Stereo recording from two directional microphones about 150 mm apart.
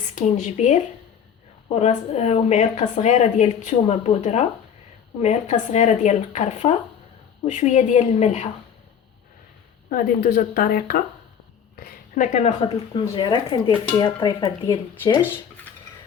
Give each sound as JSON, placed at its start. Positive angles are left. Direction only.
{"t": 0.0, "sound": "a woman's voice", "side_deg": 55}
{"t": 9.9, "sound": "a woman's voice", "side_deg": 80}
{"t": 12.9, "sound": "speech", "side_deg": 30}